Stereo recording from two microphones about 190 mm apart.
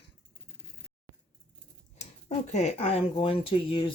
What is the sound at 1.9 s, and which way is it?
Speech, 35° left (ahead or behind).